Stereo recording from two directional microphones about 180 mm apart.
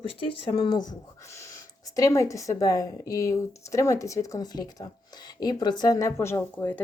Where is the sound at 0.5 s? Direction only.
25° left (ahead or behind).